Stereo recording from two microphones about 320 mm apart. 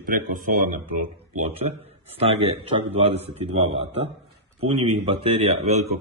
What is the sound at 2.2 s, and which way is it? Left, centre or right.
A man's voice, centre.